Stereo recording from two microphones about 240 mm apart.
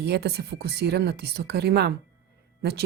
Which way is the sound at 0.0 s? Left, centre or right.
Right.